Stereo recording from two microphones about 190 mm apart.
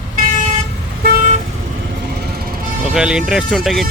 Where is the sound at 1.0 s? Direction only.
60° right (ahead or behind).